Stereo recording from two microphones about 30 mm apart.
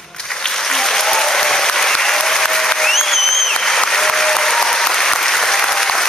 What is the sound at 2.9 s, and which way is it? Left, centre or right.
Applause, centre.